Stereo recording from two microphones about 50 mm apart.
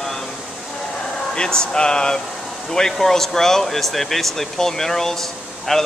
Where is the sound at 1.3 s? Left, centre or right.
Centre.